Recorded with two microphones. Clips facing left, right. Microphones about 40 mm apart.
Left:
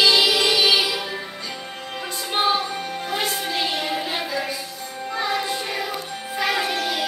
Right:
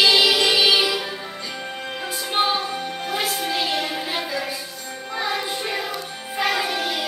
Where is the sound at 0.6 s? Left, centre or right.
Right.